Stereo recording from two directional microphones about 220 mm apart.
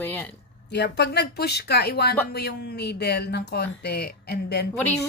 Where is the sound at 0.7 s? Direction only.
50° left (ahead or behind).